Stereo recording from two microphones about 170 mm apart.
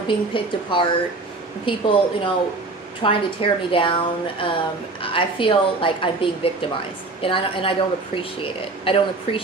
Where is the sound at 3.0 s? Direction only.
30° left (ahead or behind).